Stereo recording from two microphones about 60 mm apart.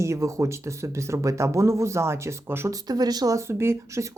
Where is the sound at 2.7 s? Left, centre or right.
Right.